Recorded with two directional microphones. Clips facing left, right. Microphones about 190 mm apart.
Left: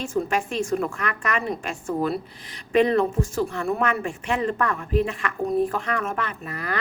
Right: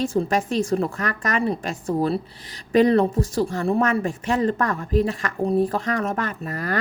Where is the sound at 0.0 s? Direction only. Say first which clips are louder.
Right 3 dB; 35° right (ahead or behind).